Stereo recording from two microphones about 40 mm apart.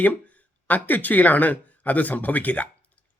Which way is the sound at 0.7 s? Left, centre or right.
Left.